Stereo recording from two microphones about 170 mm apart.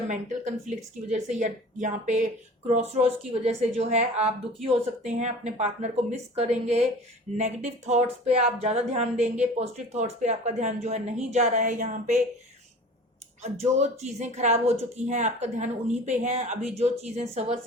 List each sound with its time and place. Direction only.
0.1 s a woman's voice: 45° right (ahead or behind)
13.4 s speech: 40° right (ahead or behind)